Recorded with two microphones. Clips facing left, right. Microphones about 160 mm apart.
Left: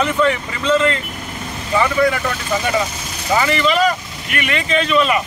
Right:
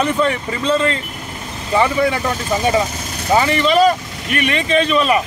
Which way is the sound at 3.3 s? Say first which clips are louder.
Right 2 dB; 30° right (ahead or behind).